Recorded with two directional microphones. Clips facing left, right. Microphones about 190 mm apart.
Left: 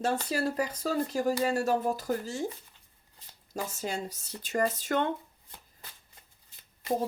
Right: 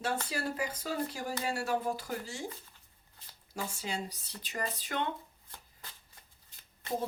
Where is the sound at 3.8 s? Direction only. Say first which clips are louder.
Left 4 dB; 45° left (ahead or behind).